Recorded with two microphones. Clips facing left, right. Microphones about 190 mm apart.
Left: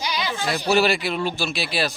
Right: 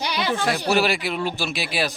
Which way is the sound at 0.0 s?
60° right (ahead or behind).